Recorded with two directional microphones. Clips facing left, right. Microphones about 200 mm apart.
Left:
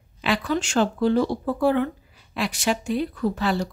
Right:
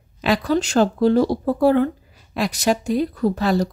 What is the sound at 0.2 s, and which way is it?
A woman's voice, 40° right (ahead or behind).